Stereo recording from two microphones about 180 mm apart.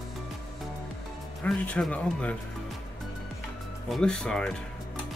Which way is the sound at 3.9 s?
5° left (ahead or behind).